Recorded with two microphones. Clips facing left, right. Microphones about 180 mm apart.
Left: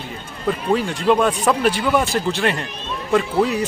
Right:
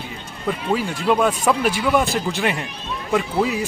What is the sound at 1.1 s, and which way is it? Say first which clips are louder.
Speech: left 1 dB; 5° right (ahead or behind).